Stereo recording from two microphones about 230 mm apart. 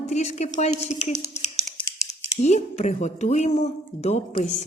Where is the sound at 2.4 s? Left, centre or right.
Left.